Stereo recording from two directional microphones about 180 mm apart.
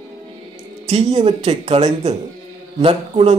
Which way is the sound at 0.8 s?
35° right (ahead or behind).